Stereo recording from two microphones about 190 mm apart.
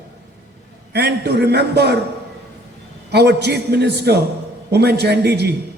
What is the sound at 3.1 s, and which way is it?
A woman's voice, 60° right (ahead or behind).